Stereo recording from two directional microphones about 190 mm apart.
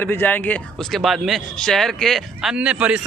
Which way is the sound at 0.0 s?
10° left (ahead or behind).